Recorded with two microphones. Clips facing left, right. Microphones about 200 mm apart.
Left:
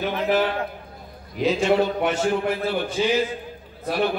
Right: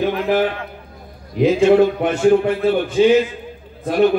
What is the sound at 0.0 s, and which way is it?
A man's voice, 50° right (ahead or behind).